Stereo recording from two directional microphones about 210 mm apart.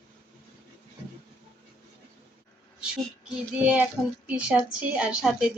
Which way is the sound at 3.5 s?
5° right (ahead or behind).